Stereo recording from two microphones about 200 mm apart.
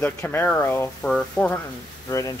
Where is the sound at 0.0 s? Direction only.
10° left (ahead or behind).